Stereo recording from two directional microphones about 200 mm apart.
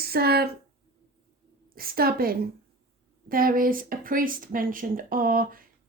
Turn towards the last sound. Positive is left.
turn(degrees=-45)  # may be behind; listen again after turning